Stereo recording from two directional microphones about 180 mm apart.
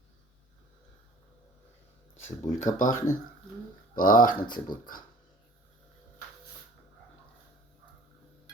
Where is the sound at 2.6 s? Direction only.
45° left (ahead or behind).